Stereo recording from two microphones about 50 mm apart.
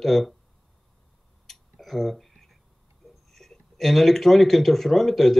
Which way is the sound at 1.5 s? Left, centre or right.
Centre.